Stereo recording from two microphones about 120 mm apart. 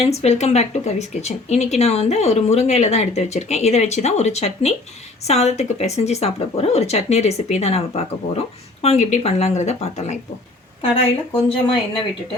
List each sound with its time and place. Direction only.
0.0 s speech: 60° left (ahead or behind)
10.8 s speech: 50° left (ahead or behind)